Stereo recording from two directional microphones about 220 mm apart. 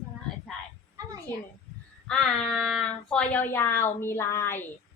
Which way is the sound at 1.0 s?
15° right (ahead or behind).